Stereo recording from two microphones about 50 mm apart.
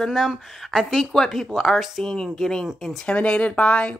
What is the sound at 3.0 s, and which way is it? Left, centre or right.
Speech, left.